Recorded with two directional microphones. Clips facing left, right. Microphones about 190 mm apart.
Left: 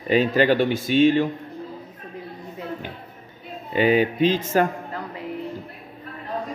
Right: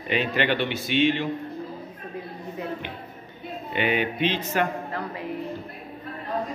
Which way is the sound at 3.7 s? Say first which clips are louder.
Left 7 dB; 35° left (ahead or behind).